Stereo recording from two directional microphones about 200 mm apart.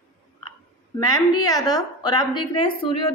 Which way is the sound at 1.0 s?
20° left (ahead or behind).